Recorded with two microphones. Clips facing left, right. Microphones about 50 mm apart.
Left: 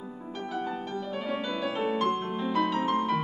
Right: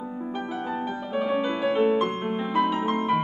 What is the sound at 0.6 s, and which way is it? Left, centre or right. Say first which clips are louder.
Music: even; centre.